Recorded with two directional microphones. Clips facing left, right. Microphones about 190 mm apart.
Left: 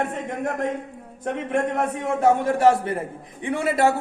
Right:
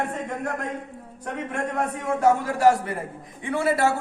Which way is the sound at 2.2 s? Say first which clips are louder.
Left 2 dB; 20° left (ahead or behind).